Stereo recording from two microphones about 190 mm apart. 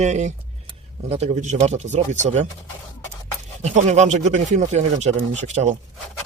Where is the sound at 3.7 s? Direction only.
35° right (ahead or behind).